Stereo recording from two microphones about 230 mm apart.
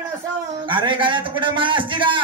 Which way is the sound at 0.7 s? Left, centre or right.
Right.